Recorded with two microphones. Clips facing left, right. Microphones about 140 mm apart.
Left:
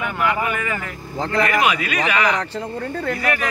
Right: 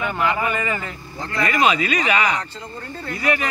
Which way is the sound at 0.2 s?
5° left (ahead or behind).